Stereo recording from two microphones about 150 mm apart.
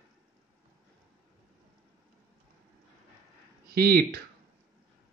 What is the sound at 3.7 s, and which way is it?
Speech, 90° right.